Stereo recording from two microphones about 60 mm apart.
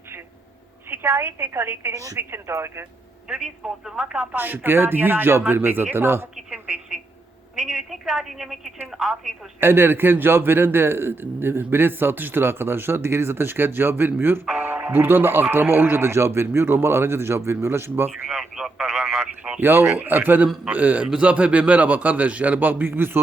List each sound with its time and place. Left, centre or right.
0.9 s a woman's voice: right
1.9 s a woman's voice: right
2.5 s speech: right
3.2 s a woman's voice: centre
4.4 s a man's voice: right
6.3 s a woman's voice: centre
9.6 s a man's voice: right
18.1 s speech: centre
19.5 s a man's voice: right
22.9 s a man's voice: right